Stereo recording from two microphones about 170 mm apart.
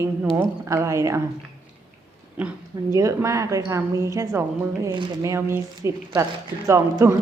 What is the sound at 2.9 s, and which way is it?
A woman's voice, 20° right (ahead or behind).